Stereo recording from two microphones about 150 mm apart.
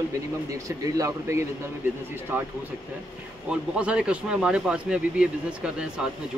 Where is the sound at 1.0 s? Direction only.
20° right (ahead or behind).